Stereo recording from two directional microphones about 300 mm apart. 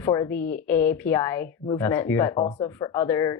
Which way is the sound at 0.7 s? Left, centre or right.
Centre.